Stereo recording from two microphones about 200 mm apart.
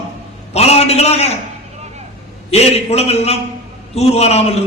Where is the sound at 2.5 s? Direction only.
30° left (ahead or behind).